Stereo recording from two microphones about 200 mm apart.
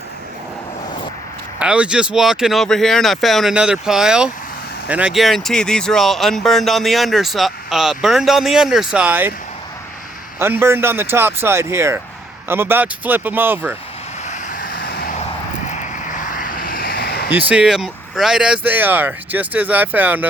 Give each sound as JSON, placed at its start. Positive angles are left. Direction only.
{"t": 1.5, "sound": "speech", "side_deg": -5}
{"t": 10.4, "sound": "speech", "side_deg": -10}
{"t": 14.3, "sound": "vehicle", "side_deg": 45}
{"t": 15.6, "sound": "vehicle", "side_deg": 40}
{"t": 17.3, "sound": "speech", "side_deg": -5}